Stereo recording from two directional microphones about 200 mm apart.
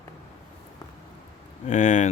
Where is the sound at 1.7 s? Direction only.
40° left (ahead or behind).